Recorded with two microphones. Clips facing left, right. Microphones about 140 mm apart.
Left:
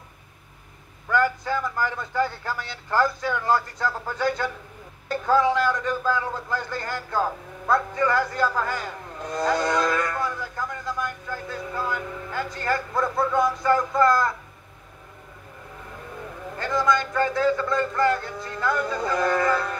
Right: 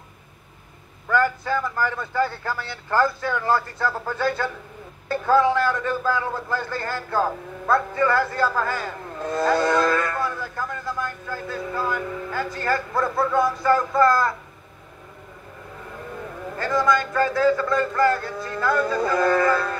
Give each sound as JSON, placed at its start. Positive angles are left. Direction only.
{"t": 1.1, "sound": "a man's voice", "side_deg": 20}
{"t": 16.5, "sound": "a man's voice", "side_deg": 20}